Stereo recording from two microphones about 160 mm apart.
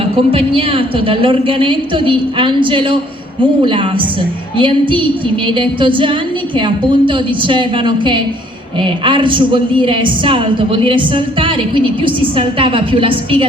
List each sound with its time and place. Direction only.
0.2 s a woman's voice: 35° right (ahead or behind)